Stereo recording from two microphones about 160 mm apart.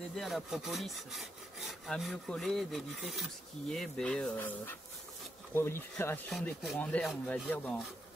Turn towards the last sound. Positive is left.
turn(degrees=10)  # may be behind; listen again after turning